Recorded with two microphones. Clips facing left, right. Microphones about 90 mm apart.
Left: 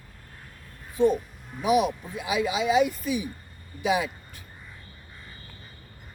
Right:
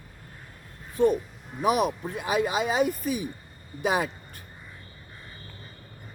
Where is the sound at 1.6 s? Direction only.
45° right (ahead or behind).